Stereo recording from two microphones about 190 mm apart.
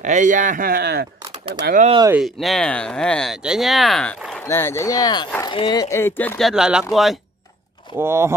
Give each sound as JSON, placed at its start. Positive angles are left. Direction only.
{"t": 0.0, "sound": "speech", "side_deg": -40}
{"t": 2.1, "sound": "speech", "side_deg": 0}
{"t": 7.9, "sound": "speech", "side_deg": -15}